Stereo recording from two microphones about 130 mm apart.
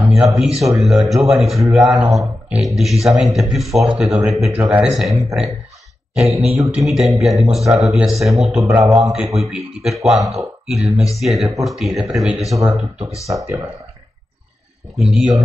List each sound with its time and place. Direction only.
0.0 s speech: centre (ahead or behind)
8.6 s speech: 20° right (ahead or behind)
9.1 s speech: centre (ahead or behind)
15.0 s speech: centre (ahead or behind)